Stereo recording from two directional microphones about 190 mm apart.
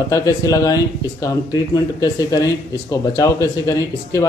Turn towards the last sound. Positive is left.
turn(degrees=15)  # may be behind; listen again after turning